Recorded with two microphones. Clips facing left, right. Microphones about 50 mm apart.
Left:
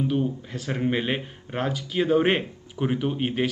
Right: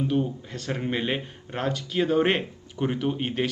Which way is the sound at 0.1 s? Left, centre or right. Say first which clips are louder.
Even; centre.